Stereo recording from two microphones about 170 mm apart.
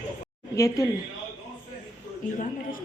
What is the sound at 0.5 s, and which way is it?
Speech, 20° left (ahead or behind).